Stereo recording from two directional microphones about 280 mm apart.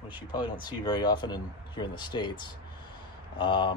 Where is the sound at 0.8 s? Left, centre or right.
Centre.